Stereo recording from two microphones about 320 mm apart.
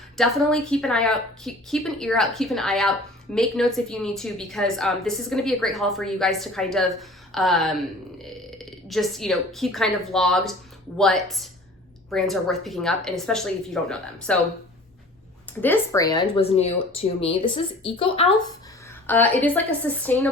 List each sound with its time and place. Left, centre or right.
0.2 s a woman's voice: centre
15.6 s speech: centre
19.0 s a woman's voice: centre